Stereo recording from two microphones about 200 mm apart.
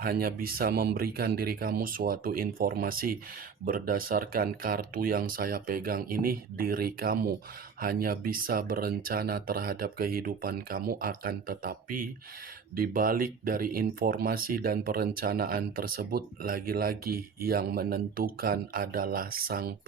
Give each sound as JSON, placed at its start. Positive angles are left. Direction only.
{"t": 0.0, "sound": "speech", "side_deg": -50}